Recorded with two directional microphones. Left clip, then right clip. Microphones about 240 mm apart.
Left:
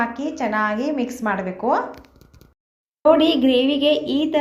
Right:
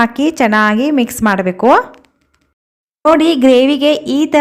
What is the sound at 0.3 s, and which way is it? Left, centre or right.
A woman's voice, right.